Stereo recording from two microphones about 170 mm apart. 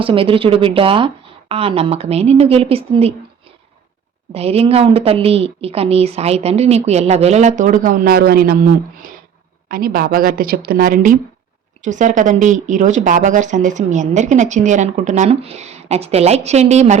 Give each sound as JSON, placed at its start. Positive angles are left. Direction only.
{"t": 0.0, "sound": "a woman's voice", "side_deg": -30}
{"t": 4.4, "sound": "a woman's voice", "side_deg": -35}
{"t": 9.6, "sound": "a woman's voice", "side_deg": -60}